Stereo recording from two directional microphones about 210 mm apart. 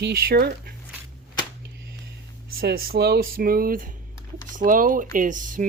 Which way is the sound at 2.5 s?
45° right (ahead or behind).